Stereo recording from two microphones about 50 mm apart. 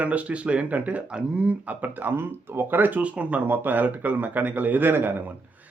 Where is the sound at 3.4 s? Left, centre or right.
Right.